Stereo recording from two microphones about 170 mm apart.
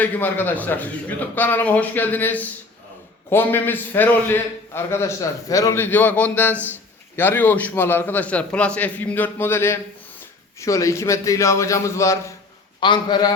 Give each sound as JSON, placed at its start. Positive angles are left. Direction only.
{"t": 0.0, "sound": "a man's voice", "side_deg": 10}